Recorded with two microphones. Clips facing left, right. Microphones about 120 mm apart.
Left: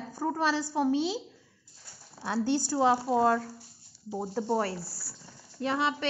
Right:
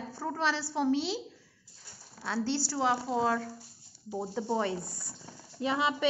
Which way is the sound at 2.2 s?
15° left (ahead or behind).